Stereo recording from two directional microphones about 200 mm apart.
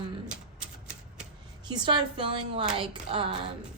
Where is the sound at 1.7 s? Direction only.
20° right (ahead or behind).